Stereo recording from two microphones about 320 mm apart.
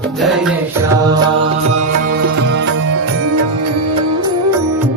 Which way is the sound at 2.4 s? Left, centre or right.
Right.